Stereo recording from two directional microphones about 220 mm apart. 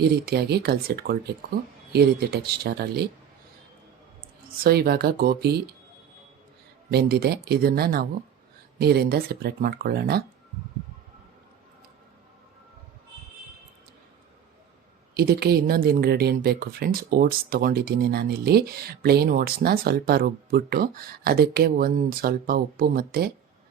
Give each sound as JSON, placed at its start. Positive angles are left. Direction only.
{"t": 0.0, "sound": "speech", "side_deg": -45}
{"t": 4.6, "sound": "speech", "side_deg": -45}
{"t": 6.9, "sound": "speech", "side_deg": -45}
{"t": 15.1, "sound": "speech", "side_deg": -45}